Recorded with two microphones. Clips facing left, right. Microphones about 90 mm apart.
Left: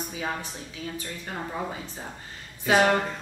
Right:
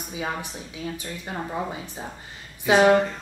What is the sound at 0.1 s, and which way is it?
Speech, 15° right (ahead or behind).